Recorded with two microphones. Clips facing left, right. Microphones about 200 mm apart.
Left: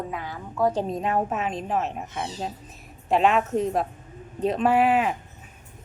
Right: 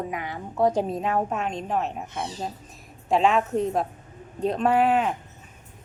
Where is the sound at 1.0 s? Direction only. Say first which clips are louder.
Even; centre (ahead or behind).